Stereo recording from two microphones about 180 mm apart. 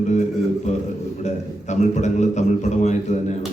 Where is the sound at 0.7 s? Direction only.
40° left (ahead or behind).